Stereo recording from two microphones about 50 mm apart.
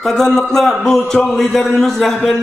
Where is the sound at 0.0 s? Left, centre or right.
Centre.